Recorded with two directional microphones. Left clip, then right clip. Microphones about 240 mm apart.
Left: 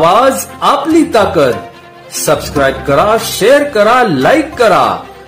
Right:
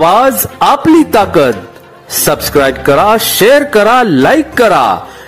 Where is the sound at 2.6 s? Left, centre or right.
Right.